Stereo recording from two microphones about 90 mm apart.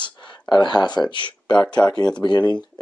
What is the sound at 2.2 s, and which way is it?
Speech, 55° left (ahead or behind).